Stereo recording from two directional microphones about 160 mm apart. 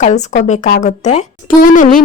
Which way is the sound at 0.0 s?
50° left (ahead or behind).